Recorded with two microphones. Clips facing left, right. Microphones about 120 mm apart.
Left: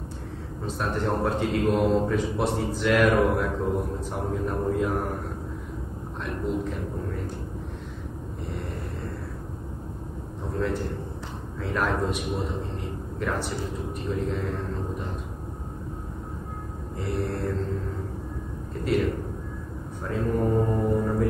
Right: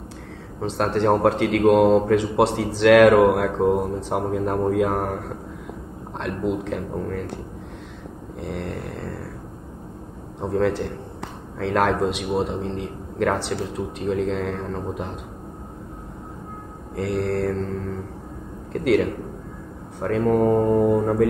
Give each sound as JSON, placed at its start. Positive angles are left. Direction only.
{"t": 0.6, "sound": "a man's voice", "side_deg": -85}
{"t": 6.6, "sound": "a man's voice", "side_deg": -90}
{"t": 8.4, "sound": "a man's voice", "side_deg": -90}
{"t": 10.4, "sound": "a man's voice", "side_deg": -85}
{"t": 16.9, "sound": "a man's voice", "side_deg": -90}
{"t": 18.7, "sound": "a man's voice", "side_deg": -90}
{"t": 20.9, "sound": "music", "side_deg": -70}